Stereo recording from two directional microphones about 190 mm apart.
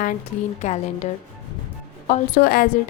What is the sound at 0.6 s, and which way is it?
A woman's voice, 35° left (ahead or behind).